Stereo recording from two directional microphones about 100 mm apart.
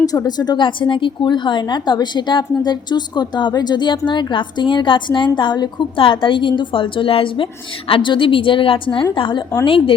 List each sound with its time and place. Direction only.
0.1 s a woman's voice: 40° left (ahead or behind); by 9.9 s 60° left (ahead or behind)